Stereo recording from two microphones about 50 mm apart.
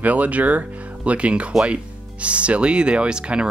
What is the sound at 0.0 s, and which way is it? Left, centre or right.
Speech, right.